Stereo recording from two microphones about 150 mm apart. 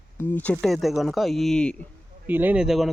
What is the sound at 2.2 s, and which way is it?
Speech, 10° right (ahead or behind).